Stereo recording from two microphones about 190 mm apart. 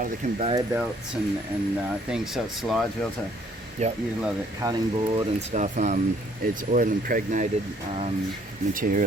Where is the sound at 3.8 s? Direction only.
35° right (ahead or behind).